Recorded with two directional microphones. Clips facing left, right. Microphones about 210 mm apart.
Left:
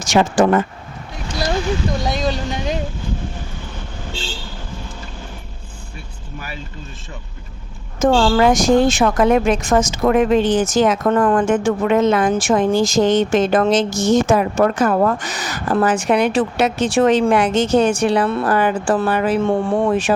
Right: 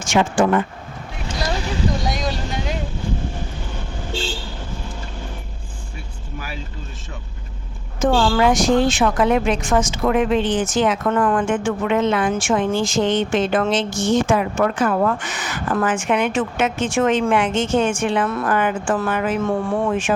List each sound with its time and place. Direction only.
0.0 s a woman's voice: 40° left (ahead or behind)
2.1 s speech: 25° left (ahead or behind)
7.9 s a woman's voice: 45° left (ahead or behind)